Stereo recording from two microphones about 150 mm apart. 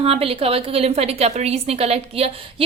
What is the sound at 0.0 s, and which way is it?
A woman's voice, 40° right (ahead or behind).